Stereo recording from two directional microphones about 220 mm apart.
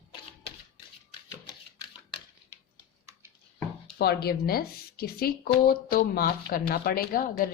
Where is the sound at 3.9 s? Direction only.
45° left (ahead or behind).